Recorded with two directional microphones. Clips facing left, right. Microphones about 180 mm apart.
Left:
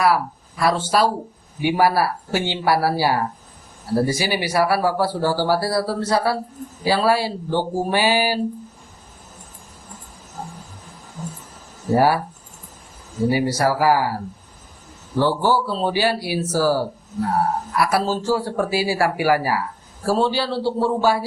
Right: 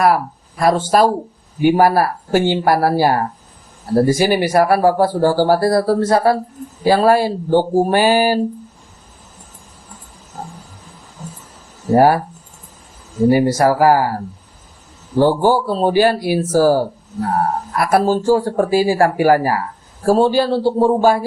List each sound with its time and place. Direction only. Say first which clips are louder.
0.0 s speech: right 4 dB; 50° right (ahead or behind)
10.4 s a sound: right 2 dB; 40° right (ahead or behind)
11.9 s speech: right 5 dB; 50° right (ahead or behind)
13.2 s speech: right 6 dB; 50° right (ahead or behind)
15.2 s speech: right 5 dB; 50° right (ahead or behind)